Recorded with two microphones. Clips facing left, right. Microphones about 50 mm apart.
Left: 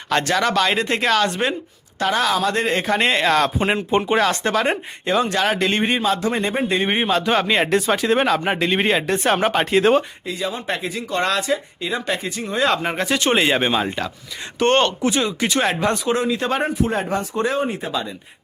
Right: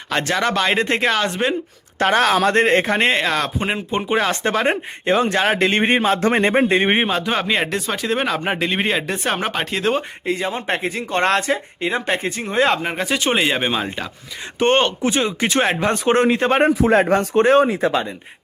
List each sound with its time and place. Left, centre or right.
0.1 s speech: centre
2.0 s speech: right
3.2 s speech: centre
4.3 s speech: right
7.1 s speech: centre
10.2 s speech: right
12.8 s speech: centre
14.6 s speech: centre
16.0 s speech: right
16.6 s a man's voice: right
17.6 s speech: right